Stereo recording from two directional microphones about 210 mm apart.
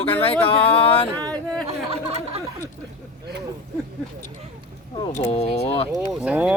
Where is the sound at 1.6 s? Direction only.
30° right (ahead or behind).